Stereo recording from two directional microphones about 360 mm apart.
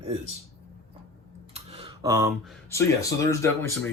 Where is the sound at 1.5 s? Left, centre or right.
Centre.